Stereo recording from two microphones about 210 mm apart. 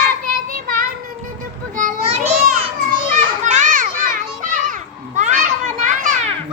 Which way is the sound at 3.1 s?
35° right (ahead or behind).